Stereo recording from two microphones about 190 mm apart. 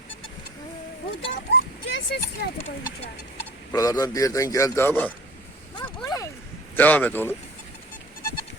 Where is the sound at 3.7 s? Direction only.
20° left (ahead or behind).